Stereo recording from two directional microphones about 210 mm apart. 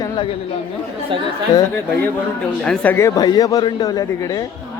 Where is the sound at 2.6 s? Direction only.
5° left (ahead or behind).